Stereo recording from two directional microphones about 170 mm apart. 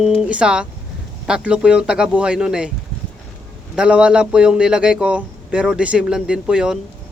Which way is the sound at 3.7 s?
5° right (ahead or behind).